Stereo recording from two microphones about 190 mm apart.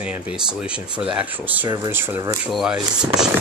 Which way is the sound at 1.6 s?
20° right (ahead or behind).